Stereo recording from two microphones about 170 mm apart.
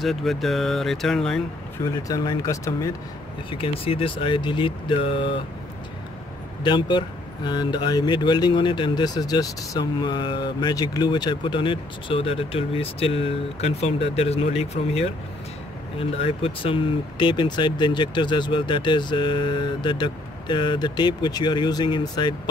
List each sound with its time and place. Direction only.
0.0 s speech: centre (ahead or behind)
1.8 s speech: 20° left (ahead or behind)
3.4 s speech: 30° left (ahead or behind)
6.6 s speech: 30° left (ahead or behind)